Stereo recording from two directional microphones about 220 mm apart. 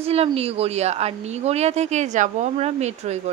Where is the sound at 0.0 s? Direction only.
25° right (ahead or behind).